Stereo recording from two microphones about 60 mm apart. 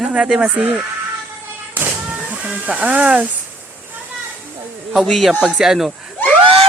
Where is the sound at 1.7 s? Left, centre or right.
Right.